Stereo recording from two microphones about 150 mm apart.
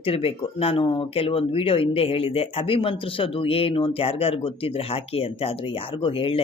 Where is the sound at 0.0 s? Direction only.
40° left (ahead or behind).